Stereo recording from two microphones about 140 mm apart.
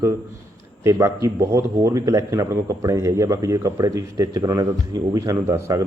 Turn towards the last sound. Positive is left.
turn(degrees=-25)  # may be behind; listen again after turning